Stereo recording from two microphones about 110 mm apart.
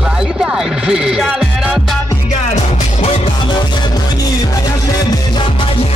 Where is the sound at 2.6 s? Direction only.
75° left (ahead or behind).